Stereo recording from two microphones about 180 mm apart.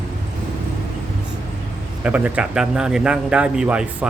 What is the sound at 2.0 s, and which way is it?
A man's voice, 10° right (ahead or behind).